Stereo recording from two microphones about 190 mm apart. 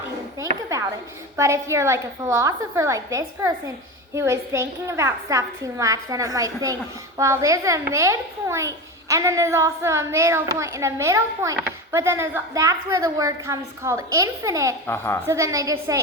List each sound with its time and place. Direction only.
0.3 s a sound: 15° right (ahead or behind)
1.4 s a child's voice: 15° right (ahead or behind)
14.8 s a woman's voice: 10° left (ahead or behind)
15.3 s a child's voice: 15° right (ahead or behind)